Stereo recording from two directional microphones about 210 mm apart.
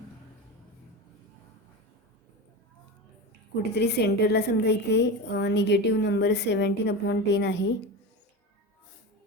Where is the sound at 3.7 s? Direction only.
50° left (ahead or behind).